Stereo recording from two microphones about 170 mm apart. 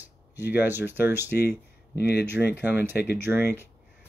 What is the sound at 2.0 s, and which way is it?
Speech, 70° left (ahead or behind).